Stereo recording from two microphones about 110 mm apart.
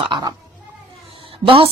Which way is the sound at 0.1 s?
40° right (ahead or behind).